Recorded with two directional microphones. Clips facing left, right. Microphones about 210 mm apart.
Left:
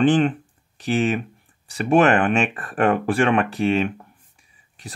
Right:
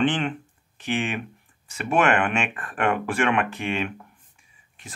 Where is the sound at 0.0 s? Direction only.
40° left (ahead or behind).